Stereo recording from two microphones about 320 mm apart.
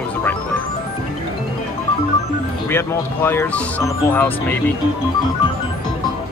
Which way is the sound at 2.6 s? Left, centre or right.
Centre.